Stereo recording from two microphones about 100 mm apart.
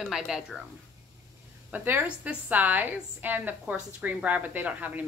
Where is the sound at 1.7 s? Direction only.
20° right (ahead or behind).